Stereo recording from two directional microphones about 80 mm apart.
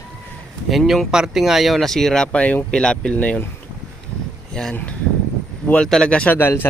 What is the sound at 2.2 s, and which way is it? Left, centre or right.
Speech, centre.